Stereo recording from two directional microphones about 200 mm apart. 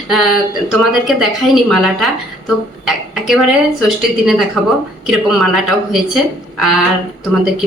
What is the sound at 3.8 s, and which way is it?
A woman's voice, centre (ahead or behind).